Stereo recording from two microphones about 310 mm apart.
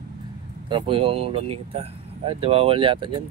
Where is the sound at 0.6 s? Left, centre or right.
Centre.